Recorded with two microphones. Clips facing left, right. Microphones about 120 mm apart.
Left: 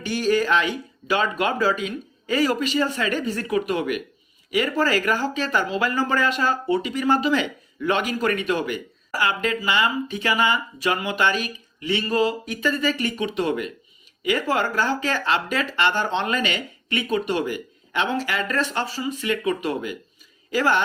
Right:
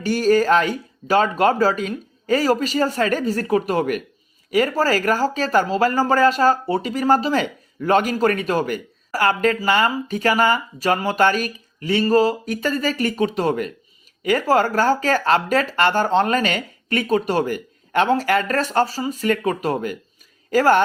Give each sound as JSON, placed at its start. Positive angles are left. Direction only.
{"t": 0.0, "sound": "speech", "side_deg": -40}